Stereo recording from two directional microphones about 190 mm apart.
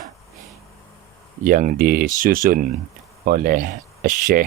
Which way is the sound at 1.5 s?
45° right (ahead or behind).